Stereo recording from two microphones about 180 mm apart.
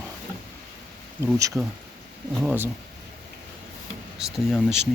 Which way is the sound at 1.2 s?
15° right (ahead or behind).